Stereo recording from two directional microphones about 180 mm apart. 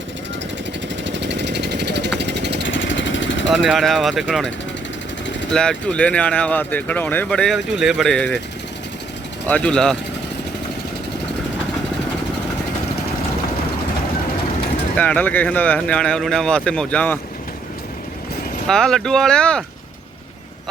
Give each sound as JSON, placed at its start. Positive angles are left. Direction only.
{"t": 1.0, "sound": "vehicle", "side_deg": -80}
{"t": 2.6, "sound": "vehicle", "side_deg": 90}
{"t": 3.5, "sound": "speech", "side_deg": 0}
{"t": 9.5, "sound": "speech", "side_deg": 5}
{"t": 14.9, "sound": "speech", "side_deg": 10}
{"t": 18.7, "sound": "speech", "side_deg": 5}